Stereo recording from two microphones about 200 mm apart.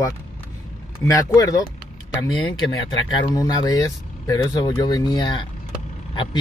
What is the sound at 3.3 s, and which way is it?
Speech, 20° left (ahead or behind).